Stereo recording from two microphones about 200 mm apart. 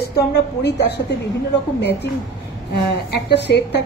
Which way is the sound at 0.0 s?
55° left (ahead or behind).